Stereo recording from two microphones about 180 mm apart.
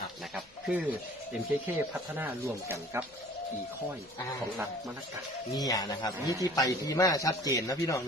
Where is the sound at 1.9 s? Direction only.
15° right (ahead or behind).